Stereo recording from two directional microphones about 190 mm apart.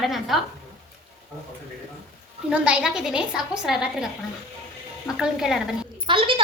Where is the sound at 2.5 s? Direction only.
5° right (ahead or behind).